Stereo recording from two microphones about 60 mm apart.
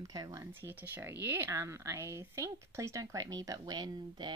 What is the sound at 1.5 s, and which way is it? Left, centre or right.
Speech, right.